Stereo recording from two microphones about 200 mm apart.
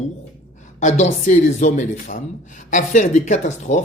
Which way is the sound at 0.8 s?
35° left (ahead or behind).